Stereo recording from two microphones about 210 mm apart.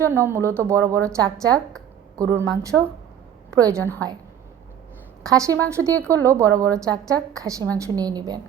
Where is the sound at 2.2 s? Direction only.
15° right (ahead or behind).